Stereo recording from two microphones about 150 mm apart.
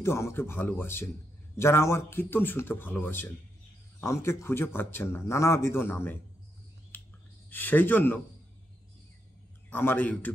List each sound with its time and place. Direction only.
0.0 s a man's voice: 15° left (ahead or behind)
6.9 s a sound: 15° left (ahead or behind)
7.4 s a man's voice: 10° left (ahead or behind)
9.7 s a man's voice: 15° left (ahead or behind)